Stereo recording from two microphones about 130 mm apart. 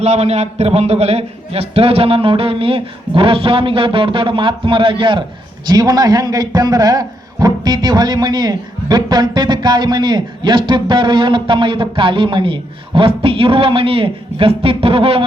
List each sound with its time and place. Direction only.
0.0 s a man's voice: 55° right (ahead or behind)